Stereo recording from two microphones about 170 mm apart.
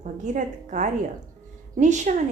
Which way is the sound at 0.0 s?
45° right (ahead or behind).